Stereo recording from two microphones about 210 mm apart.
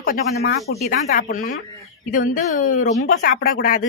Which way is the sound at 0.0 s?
45° left (ahead or behind).